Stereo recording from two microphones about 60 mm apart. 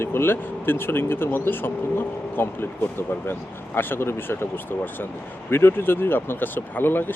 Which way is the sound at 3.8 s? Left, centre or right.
Left.